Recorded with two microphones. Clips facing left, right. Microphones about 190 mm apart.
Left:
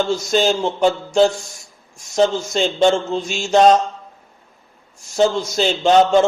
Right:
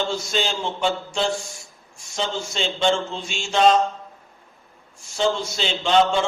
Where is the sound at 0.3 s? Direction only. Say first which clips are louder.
Left 8 dB; 45° left (ahead or behind).